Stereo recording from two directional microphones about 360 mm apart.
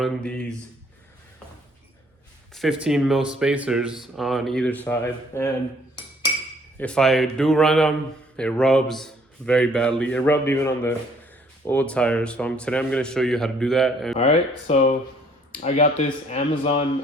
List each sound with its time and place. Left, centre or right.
0.0 s speech: centre
2.5 s speech: centre
6.7 s speech: centre
14.2 s speech: centre